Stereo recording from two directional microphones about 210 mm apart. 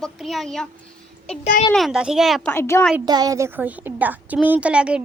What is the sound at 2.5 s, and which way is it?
Speech, 10° left (ahead or behind).